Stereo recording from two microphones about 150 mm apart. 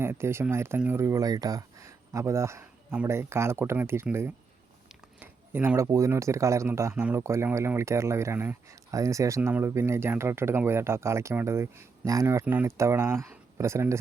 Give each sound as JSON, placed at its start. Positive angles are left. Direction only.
{"t": 0.0, "sound": "speech", "side_deg": -15}